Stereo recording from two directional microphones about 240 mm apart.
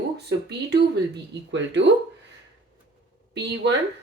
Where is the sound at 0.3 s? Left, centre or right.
Right.